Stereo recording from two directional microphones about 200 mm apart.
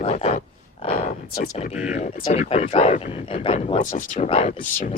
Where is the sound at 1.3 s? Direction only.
45° left (ahead or behind).